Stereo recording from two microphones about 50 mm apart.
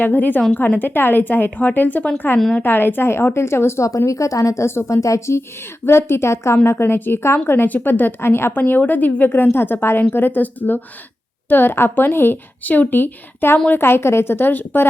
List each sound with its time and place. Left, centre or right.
0.0 s a woman's voice: left
4.7 s speech: left
5.8 s speech: left
6.7 s a woman's voice: left
12.6 s a woman's voice: left